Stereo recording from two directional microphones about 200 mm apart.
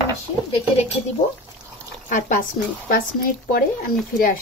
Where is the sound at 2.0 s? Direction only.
40° left (ahead or behind).